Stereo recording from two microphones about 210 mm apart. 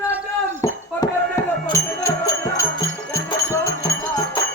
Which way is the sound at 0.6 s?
15° left (ahead or behind).